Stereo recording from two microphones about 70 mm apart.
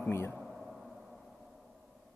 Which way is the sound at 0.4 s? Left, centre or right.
Centre.